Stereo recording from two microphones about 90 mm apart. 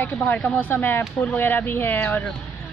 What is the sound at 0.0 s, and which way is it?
Speech, 20° left (ahead or behind).